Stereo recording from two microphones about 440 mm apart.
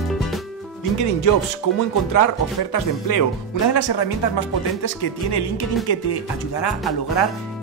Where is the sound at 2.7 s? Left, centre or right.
Left.